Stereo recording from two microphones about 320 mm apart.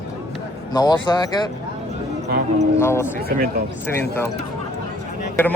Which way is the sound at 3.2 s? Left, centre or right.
Right.